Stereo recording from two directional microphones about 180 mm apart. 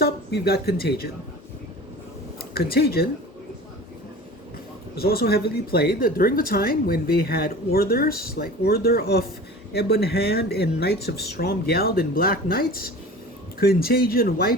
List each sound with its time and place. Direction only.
0.0 s speech: 60° left (ahead or behind)
2.6 s speech: 60° left (ahead or behind)
4.9 s speech: 60° left (ahead or behind)